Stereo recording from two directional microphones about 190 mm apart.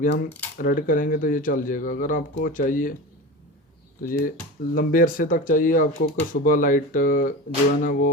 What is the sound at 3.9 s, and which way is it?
Speech, 45° left (ahead or behind).